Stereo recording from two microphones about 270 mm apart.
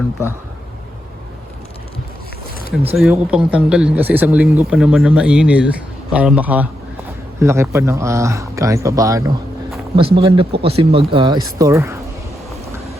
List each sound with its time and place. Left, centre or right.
2.9 s a man's voice: centre